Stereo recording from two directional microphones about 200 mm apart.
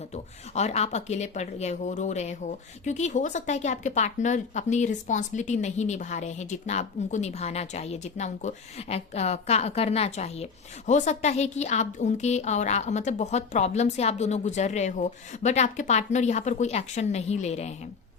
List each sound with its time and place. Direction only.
0.1 s speech: 35° left (ahead or behind)